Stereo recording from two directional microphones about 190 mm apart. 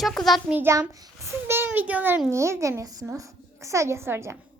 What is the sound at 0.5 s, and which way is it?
A child's voice, 15° right (ahead or behind).